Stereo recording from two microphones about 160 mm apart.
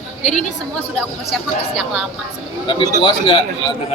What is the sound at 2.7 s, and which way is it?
Speech, 30° left (ahead or behind).